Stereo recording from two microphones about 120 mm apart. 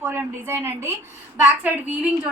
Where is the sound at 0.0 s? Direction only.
20° right (ahead or behind).